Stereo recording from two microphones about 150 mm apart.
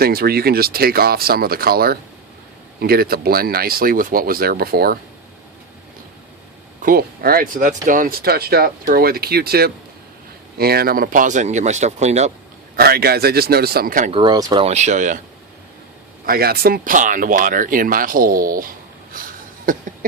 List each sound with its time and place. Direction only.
0.0 s speech: 90° right
6.8 s speech: 80° right; by 12.3 s 50° right (ahead or behind)
12.7 s speech: 90° right; by 14.1 s 70° right (ahead or behind)
14.1 s speech: 30° right (ahead or behind)
14.7 s speech: 50° right (ahead or behind)
16.2 s speech: 85° right; by 18.7 s 65° right (ahead or behind)